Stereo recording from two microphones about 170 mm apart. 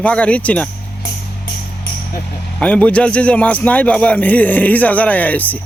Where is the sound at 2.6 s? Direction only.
5° left (ahead or behind).